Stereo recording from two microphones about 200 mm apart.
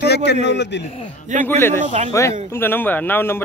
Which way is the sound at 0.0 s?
55° left (ahead or behind).